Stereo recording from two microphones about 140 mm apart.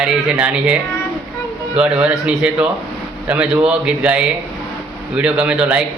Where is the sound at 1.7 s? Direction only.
10° right (ahead or behind).